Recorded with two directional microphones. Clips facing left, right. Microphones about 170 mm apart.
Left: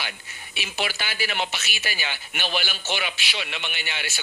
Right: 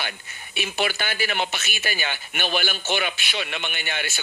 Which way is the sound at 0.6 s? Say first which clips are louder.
Right 4 dB; 55° right (ahead or behind).